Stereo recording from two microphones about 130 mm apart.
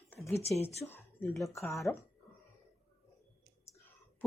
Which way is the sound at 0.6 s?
15° left (ahead or behind).